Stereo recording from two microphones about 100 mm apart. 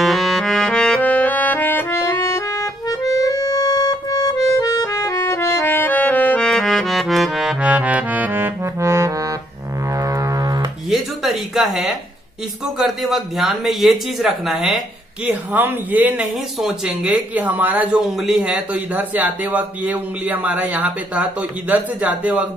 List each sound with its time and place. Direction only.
0.0 s music: centre (ahead or behind)
7.6 s accordion: 15° right (ahead or behind); by 9.3 s 30° right (ahead or behind)
9.9 s music: 35° right (ahead or behind)
10.9 s a sound: centre (ahead or behind)
12.7 s speech: 5° right (ahead or behind)
15.2 s speech: 15° right (ahead or behind)
16.5 s speech: 5° right (ahead or behind)